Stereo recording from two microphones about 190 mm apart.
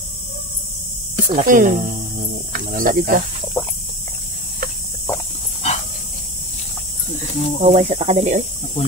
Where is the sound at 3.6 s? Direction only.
15° left (ahead or behind).